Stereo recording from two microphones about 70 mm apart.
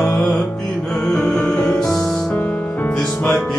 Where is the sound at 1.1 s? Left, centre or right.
Centre.